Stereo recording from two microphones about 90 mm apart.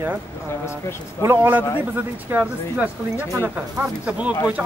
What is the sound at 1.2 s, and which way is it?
Speech, 30° right (ahead or behind).